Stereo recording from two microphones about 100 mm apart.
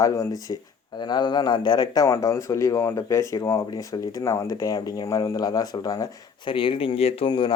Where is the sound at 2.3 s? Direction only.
30° left (ahead or behind).